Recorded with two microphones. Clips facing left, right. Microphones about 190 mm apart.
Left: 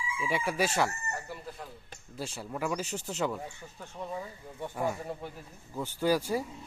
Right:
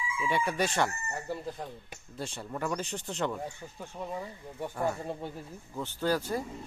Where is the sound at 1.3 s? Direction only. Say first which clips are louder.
Right 6 dB; 30° right (ahead or behind).